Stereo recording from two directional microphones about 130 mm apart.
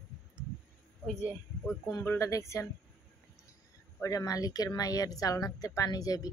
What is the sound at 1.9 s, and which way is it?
Speech, 25° left (ahead or behind).